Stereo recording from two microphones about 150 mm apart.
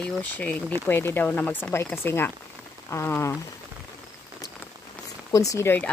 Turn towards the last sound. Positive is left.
turn(degrees=15)  # may be behind; listen again after turning